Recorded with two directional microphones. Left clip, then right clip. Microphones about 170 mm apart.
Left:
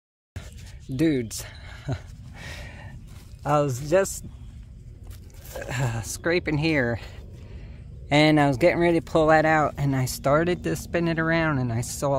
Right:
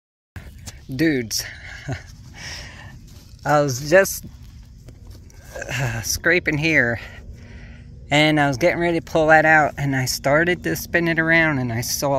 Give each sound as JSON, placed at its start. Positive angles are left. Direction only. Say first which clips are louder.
{"t": 0.9, "sound": "a sound", "louder": "right 4 dB", "side_deg": 10}
{"t": 3.4, "sound": "speech", "louder": "right 5 dB", "side_deg": -5}
{"t": 3.8, "sound": "speech", "louder": "right 10 dB", "side_deg": -15}
{"t": 5.5, "sound": "speech", "louder": "right 5 dB", "side_deg": 10}
{"t": 8.1, "sound": "speech", "louder": "right 2 dB", "side_deg": 10}